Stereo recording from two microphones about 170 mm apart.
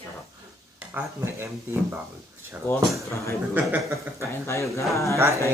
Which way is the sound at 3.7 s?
15° right (ahead or behind).